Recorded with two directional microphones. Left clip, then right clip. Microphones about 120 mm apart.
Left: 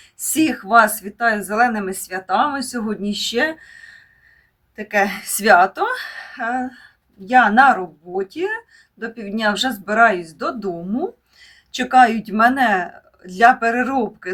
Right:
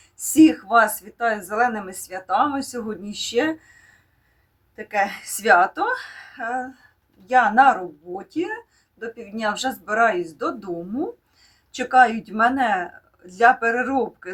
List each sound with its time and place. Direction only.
0.2 s speech: 10° left (ahead or behind)
4.8 s speech: 15° left (ahead or behind)